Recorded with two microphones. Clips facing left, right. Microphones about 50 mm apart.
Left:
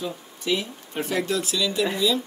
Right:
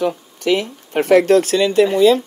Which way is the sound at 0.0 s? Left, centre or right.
Right.